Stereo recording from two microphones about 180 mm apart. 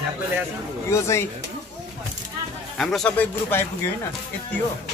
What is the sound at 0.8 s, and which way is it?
Speech, 15° left (ahead or behind).